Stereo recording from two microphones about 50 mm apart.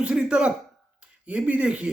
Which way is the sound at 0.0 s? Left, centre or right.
Centre.